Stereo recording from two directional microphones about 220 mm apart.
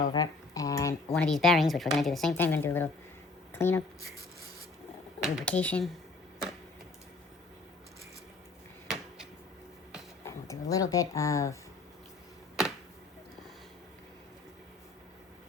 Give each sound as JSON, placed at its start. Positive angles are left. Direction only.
{"t": 0.1, "sound": "speech", "side_deg": 15}
{"t": 5.2, "sound": "speech", "side_deg": 0}
{"t": 10.2, "sound": "speech", "side_deg": 15}